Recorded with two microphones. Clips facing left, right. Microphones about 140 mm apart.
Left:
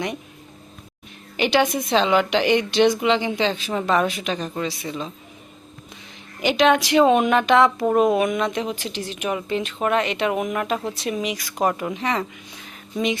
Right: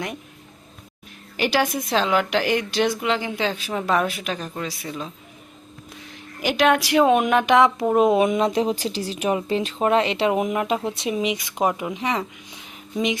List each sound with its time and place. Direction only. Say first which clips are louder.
1.4 s a woman's voice: left 2 dB; 5° right (ahead or behind)
6.4 s speech: left 1 dB; 5° right (ahead or behind)